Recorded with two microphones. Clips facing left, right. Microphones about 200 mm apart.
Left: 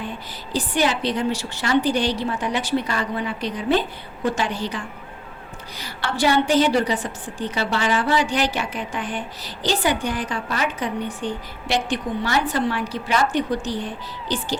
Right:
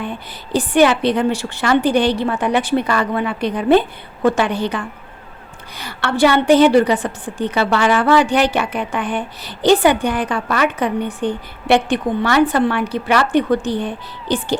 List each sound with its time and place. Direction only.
0.5 s a woman's voice: 60° right (ahead or behind)